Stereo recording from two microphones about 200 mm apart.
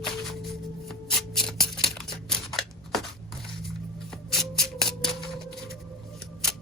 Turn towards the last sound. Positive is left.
turn(degrees=0)  # may be behind; listen again after turning